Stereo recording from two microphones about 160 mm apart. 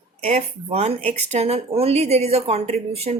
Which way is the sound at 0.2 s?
45° right (ahead or behind).